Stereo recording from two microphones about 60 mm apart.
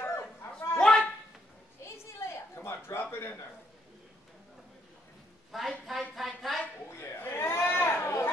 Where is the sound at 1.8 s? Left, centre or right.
Left.